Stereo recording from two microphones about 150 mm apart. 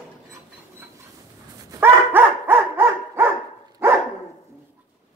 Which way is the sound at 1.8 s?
15° right (ahead or behind).